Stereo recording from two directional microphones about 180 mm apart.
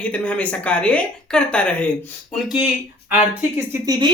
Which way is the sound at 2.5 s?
10° right (ahead or behind).